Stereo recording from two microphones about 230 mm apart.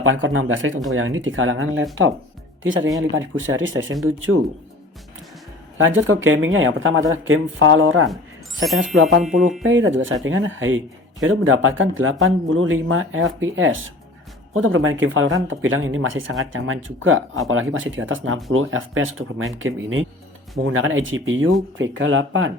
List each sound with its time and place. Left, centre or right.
0.0 s speech: right
5.7 s speech: right
8.6 s speech: centre
9.6 s speech: right